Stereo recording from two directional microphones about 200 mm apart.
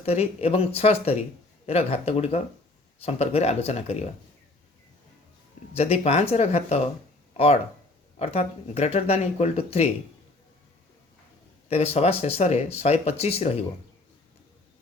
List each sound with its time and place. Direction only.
0.0 s speech: 30° left (ahead or behind)
5.7 s speech: 30° left (ahead or behind)
11.7 s speech: 30° left (ahead or behind)